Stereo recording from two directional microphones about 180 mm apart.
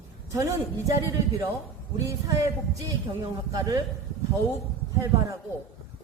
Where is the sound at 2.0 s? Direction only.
15° right (ahead or behind).